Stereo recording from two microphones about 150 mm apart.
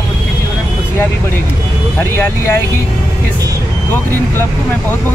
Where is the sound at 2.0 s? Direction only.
15° left (ahead or behind).